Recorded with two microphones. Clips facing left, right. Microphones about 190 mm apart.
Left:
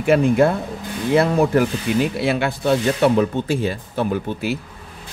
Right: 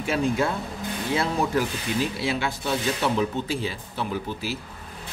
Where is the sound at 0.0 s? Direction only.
60° left (ahead or behind).